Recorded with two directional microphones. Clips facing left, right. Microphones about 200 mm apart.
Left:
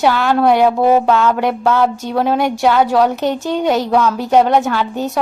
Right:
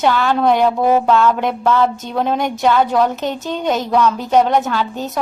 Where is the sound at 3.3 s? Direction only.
15° left (ahead or behind).